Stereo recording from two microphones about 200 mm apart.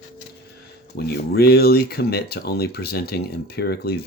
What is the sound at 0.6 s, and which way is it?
Speech, 55° left (ahead or behind).